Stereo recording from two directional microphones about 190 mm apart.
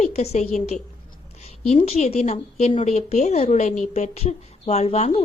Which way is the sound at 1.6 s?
35° left (ahead or behind).